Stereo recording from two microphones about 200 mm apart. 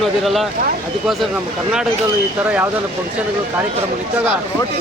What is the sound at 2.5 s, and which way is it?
Speech, 5° right (ahead or behind).